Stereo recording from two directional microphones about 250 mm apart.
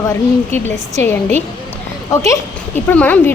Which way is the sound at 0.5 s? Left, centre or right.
Centre.